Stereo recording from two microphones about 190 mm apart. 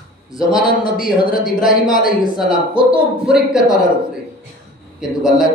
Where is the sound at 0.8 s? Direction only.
50° left (ahead or behind).